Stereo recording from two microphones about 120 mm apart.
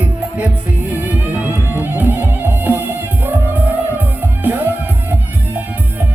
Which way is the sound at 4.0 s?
15° right (ahead or behind).